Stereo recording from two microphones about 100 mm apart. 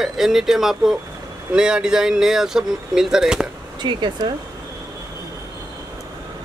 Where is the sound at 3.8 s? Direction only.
45° right (ahead or behind).